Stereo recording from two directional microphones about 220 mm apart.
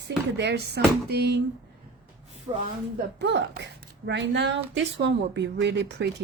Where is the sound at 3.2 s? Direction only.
50° right (ahead or behind).